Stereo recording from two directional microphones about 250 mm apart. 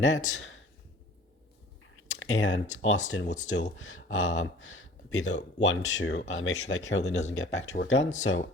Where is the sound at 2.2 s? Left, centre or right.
Left.